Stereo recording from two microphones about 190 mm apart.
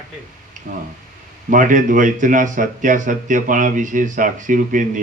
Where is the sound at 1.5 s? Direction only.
45° right (ahead or behind).